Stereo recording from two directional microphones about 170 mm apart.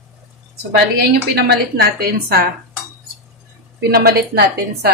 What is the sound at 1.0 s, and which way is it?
A woman's voice, 70° right (ahead or behind).